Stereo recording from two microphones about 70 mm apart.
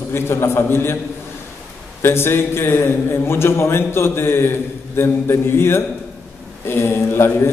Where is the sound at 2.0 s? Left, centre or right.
Left.